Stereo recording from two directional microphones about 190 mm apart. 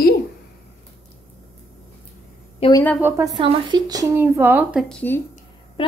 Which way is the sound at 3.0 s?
15° right (ahead or behind).